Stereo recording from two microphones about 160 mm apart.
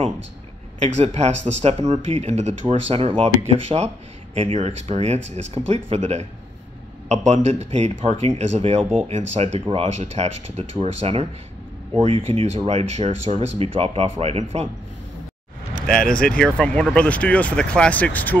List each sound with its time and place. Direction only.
0.8 s speech: 45° right (ahead or behind)
15.9 s speech: 5° left (ahead or behind)